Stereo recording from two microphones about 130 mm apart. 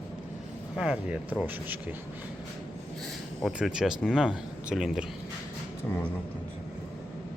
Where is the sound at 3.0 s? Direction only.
Centre (ahead or behind).